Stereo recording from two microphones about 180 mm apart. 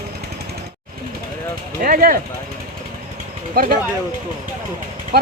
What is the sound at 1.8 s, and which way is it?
Speech, 50° right (ahead or behind).